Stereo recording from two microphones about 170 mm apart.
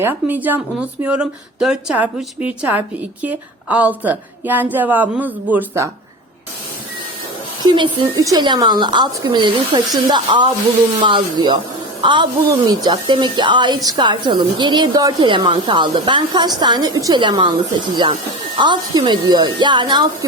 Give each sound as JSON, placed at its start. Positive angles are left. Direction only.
{"t": 0.0, "sound": "speech", "side_deg": -10}
{"t": 7.6, "sound": "a woman's voice", "side_deg": -25}